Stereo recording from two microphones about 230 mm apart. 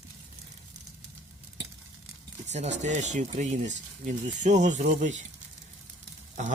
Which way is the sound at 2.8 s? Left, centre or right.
Right.